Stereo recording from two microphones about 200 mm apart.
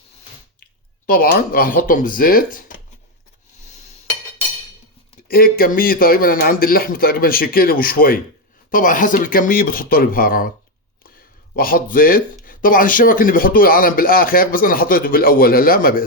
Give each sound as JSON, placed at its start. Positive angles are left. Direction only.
{"t": 1.0, "sound": "speech", "side_deg": 45}
{"t": 3.6, "sound": "a sound", "side_deg": 35}
{"t": 5.3, "sound": "speech", "side_deg": 45}
{"t": 11.5, "sound": "speech", "side_deg": 45}